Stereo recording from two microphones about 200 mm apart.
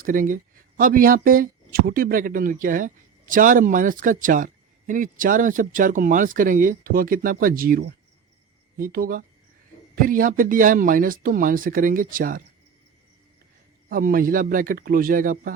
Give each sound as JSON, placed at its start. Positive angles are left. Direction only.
{"t": 0.0, "sound": "speech", "side_deg": -45}
{"t": 13.9, "sound": "speech", "side_deg": -45}